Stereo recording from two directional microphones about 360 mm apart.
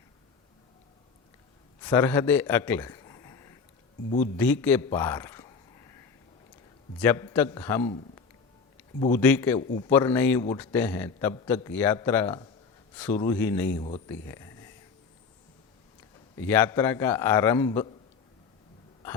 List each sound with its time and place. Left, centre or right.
1.8 s a man's voice: centre
7.0 s a man's voice: centre
9.6 s a man's voice: centre
9.9 s a man's voice: centre
16.4 s a man's voice: centre